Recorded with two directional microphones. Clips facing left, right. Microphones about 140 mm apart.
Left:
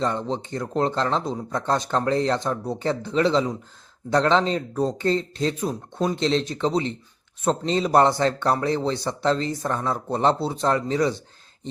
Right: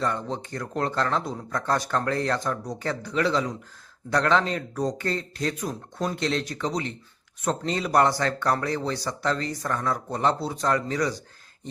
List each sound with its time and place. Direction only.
0.0 s speech: 25° left (ahead or behind)